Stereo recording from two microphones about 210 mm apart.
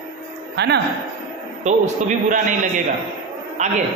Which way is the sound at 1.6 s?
35° right (ahead or behind).